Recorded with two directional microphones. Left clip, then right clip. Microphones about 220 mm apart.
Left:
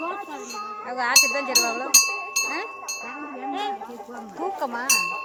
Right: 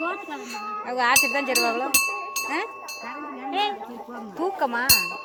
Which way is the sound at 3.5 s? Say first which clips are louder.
Right 4 dB; 30° right (ahead or behind).